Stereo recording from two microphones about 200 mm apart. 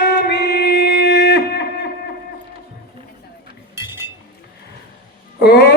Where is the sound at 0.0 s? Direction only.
55° left (ahead or behind).